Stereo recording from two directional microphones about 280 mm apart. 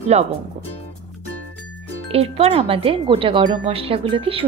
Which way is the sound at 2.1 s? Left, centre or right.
Right.